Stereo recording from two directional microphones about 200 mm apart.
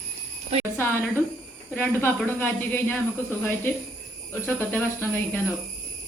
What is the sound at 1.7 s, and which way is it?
Speech, 10° left (ahead or behind).